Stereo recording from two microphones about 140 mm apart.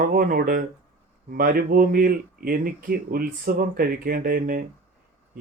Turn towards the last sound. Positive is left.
turn(degrees=-90)